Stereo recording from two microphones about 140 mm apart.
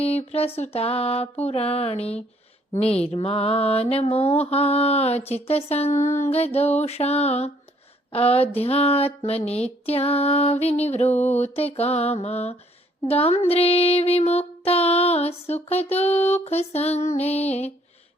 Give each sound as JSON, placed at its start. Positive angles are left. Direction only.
{"t": 0.0, "sound": "speech", "side_deg": 50}